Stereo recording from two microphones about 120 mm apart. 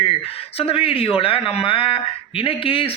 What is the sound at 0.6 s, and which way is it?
A man's voice, 50° left (ahead or behind).